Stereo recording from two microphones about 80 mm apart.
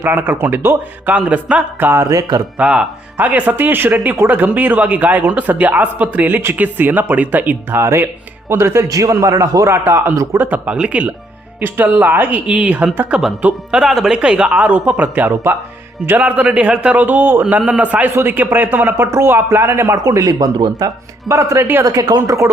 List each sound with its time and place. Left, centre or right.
0.0 s speech: right
1.9 s a man's voice: right
2.6 s speech: centre
3.2 s speech: right
8.9 s a man's voice: right
9.6 s a man's voice: right
20.0 s a man's voice: right
21.2 s a man's voice: right
21.9 s speech: right